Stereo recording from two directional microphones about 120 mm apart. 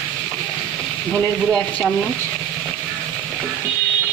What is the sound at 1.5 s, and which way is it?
Speech, 5° left (ahead or behind).